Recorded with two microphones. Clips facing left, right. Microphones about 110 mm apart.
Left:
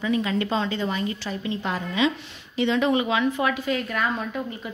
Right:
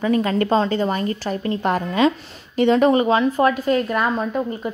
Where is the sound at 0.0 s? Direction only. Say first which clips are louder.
Right 5 dB; 45° right (ahead or behind).